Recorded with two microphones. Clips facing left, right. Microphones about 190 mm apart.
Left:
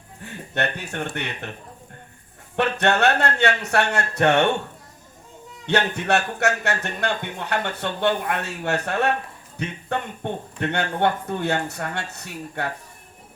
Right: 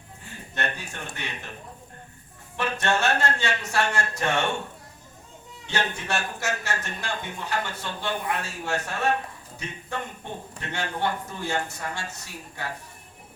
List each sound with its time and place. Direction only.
0.5 s a man's voice: 60° left (ahead or behind)
2.6 s a man's voice: 65° left (ahead or behind)
5.6 s a man's voice: 65° left (ahead or behind)
10.2 s a man's voice: 60° left (ahead or behind)